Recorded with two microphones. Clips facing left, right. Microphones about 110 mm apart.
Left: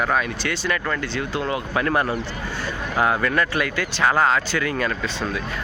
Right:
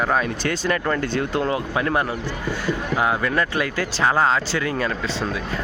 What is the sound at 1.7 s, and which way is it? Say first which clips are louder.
Speech: left 1 dB; 20° right (ahead or behind).